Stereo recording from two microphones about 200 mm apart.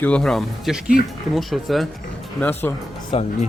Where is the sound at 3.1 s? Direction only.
25° left (ahead or behind).